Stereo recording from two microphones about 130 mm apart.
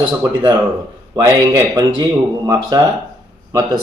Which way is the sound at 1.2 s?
35° right (ahead or behind).